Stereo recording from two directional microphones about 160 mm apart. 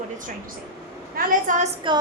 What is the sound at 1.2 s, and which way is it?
Speech, 55° right (ahead or behind).